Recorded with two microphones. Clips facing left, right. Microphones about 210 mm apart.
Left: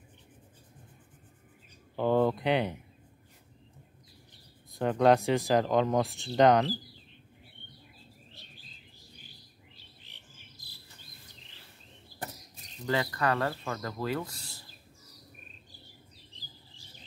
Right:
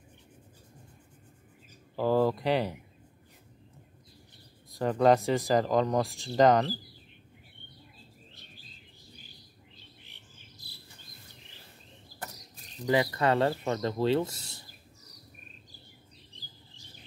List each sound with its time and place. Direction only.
2.0 s speech: centre (ahead or behind)
4.6 s speech: centre (ahead or behind)
12.8 s speech: 20° right (ahead or behind)